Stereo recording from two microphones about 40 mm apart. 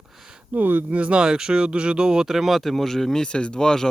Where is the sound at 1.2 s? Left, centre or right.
Right.